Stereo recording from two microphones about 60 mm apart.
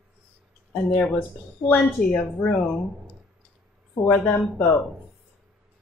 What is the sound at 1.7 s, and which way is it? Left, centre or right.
Speech, left.